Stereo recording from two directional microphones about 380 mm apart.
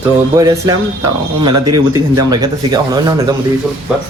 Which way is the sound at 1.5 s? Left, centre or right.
Right.